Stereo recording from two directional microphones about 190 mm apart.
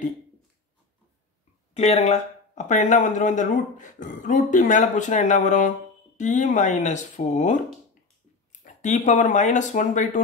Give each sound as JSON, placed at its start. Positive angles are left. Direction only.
{"t": 1.7, "sound": "speech", "side_deg": 35}